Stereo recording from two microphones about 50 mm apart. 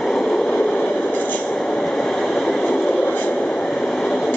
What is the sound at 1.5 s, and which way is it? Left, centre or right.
Train, centre.